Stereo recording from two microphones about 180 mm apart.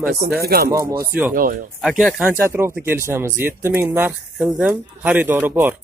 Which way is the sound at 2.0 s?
Centre (ahead or behind).